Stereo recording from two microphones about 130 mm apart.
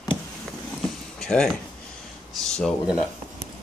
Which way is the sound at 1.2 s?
5° left (ahead or behind).